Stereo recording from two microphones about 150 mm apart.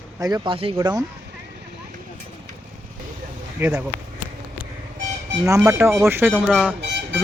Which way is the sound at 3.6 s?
5° right (ahead or behind).